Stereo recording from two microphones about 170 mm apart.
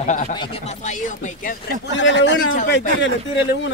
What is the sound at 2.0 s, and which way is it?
Speech, 90° left.